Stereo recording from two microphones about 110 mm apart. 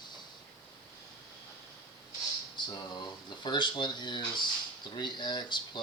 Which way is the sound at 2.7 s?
40° left (ahead or behind).